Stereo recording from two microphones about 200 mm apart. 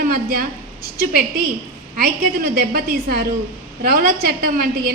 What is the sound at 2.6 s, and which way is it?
A woman's voice, 50° right (ahead or behind).